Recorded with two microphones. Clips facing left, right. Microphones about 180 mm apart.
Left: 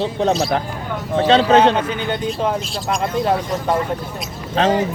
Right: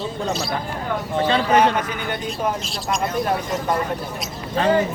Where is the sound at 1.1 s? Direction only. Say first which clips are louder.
Left 6 dB; 85° left.